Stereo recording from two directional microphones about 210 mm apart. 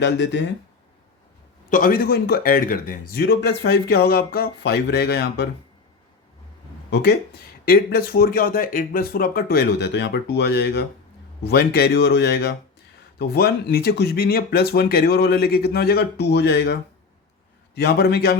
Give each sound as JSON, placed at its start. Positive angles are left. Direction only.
{"t": 0.0, "sound": "speech", "side_deg": 55}
{"t": 1.7, "sound": "speech", "side_deg": 40}
{"t": 6.9, "sound": "speech", "side_deg": 50}
{"t": 17.7, "sound": "speech", "side_deg": 50}